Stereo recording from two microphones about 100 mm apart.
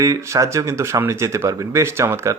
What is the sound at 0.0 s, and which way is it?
Speech, 35° right (ahead or behind).